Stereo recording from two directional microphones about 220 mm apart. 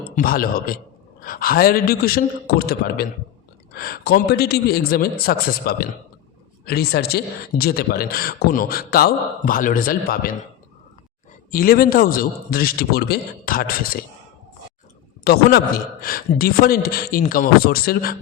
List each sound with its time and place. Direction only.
0.2 s a man's voice: 40° left (ahead or behind)
11.5 s a man's voice: 40° left (ahead or behind)
15.2 s a man's voice: 45° left (ahead or behind)